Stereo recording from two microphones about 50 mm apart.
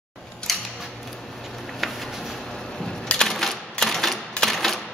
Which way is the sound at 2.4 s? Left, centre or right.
Centre.